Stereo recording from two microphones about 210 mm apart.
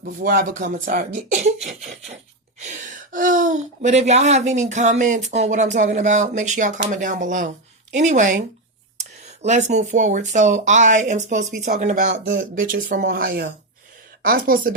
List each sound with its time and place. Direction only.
0.0 s speech: 40° right (ahead or behind)
12.1 s speech: 55° right (ahead or behind)
12.4 s a woman's voice: 40° right (ahead or behind)